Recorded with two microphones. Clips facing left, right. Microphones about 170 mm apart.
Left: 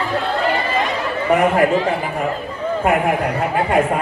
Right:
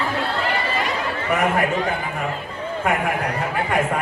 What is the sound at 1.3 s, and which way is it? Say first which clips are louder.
Speech: left 6 dB; 35° left (ahead or behind).